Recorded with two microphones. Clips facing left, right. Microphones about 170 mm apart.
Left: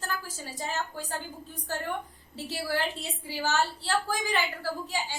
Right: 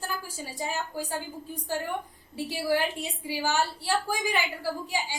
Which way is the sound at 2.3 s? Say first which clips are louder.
Right 5 dB; 15° right (ahead or behind).